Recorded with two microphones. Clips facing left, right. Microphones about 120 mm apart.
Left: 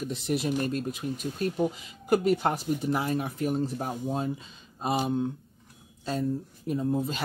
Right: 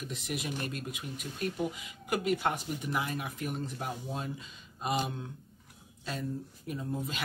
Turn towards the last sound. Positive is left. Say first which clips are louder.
# left 8 dB
turn(degrees=35)  # may be behind; listen again after turning